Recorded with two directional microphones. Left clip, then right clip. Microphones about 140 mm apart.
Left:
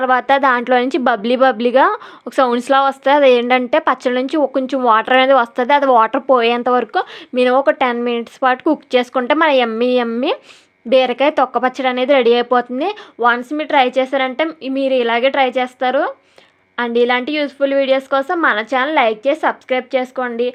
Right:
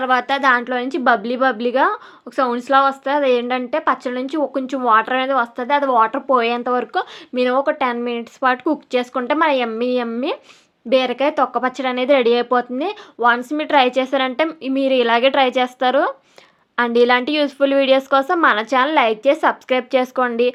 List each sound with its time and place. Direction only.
0.0 s a woman's voice: 45° left (ahead or behind); by 20.5 s 5° right (ahead or behind)